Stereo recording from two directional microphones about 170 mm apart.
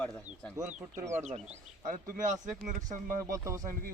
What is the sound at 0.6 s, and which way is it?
Speech, 45° right (ahead or behind).